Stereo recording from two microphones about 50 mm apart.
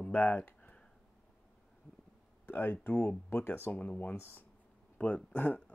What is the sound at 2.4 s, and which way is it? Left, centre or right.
Speech, left.